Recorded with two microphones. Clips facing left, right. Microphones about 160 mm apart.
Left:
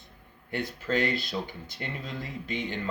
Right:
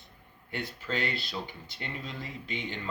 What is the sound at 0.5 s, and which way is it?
Speech, 45° left (ahead or behind).